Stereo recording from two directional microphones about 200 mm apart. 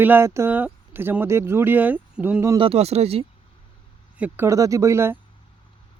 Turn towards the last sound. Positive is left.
turn(degrees=-15)  # may be behind; listen again after turning